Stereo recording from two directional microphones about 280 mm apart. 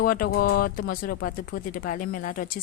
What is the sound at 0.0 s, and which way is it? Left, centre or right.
A woman's voice, left.